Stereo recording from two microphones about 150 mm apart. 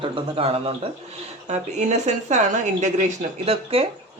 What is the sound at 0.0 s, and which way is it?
Speech, 40° right (ahead or behind).